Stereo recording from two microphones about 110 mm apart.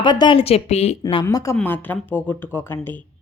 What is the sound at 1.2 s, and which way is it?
Speech, 30° left (ahead or behind).